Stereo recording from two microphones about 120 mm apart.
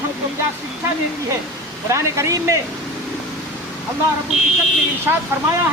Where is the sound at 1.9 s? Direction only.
25° right (ahead or behind).